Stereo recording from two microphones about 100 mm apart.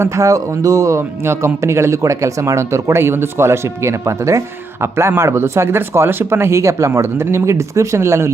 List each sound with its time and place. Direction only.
0.0 s speech: 35° right (ahead or behind)